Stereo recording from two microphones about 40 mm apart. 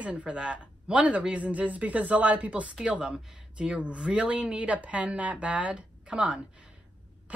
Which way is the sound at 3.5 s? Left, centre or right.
Right.